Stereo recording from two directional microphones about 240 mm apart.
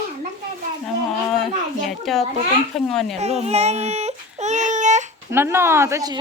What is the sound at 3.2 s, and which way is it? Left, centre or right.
Baby cry, right.